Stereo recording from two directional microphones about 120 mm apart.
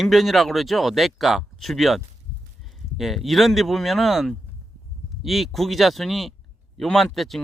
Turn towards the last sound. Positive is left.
turn(degrees=0)  # may be behind; listen again after turning